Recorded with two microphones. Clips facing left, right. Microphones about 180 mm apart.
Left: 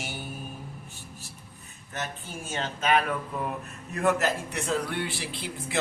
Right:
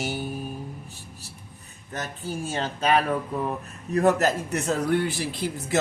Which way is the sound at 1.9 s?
35° right (ahead or behind).